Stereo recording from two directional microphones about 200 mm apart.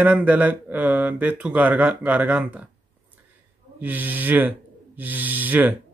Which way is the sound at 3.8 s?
10° right (ahead or behind).